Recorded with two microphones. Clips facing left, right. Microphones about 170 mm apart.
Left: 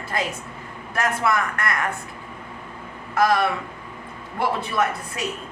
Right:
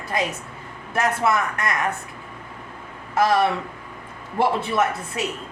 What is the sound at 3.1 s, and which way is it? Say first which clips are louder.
A woman's voice: right 1 dB; 25° right (ahead or behind).